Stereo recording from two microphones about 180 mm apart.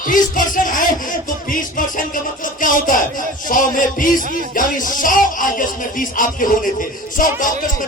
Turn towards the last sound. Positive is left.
turn(degrees=50)  # may be behind; listen again after turning